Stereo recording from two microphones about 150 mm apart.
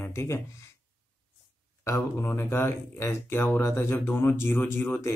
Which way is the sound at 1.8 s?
15° left (ahead or behind).